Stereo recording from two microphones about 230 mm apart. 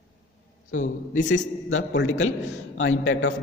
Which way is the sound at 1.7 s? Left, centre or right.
Left.